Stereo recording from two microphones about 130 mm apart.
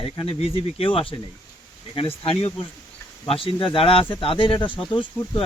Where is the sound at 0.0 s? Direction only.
45° left (ahead or behind).